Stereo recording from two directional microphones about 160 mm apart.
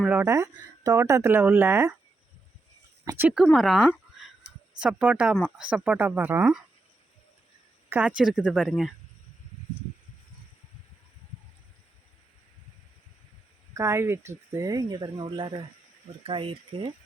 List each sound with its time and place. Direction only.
0.0 s speech: 10° right (ahead or behind)
3.0 s speech: 20° right (ahead or behind)
3.2 s speech: centre (ahead or behind)
7.9 s speech: 10° right (ahead or behind)
13.7 s speech: 15° right (ahead or behind); by 16.9 s 35° right (ahead or behind)